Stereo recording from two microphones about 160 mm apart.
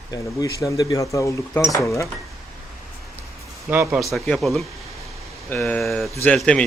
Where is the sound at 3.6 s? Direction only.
10° right (ahead or behind).